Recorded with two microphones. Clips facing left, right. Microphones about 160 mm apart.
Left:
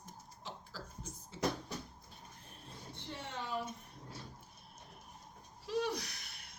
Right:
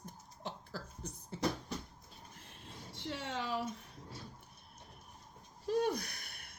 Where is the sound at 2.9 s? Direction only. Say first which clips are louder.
Right 5 dB; 90° right.